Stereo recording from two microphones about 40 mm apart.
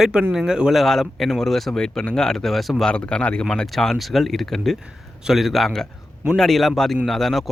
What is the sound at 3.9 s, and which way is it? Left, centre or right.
Speech, centre.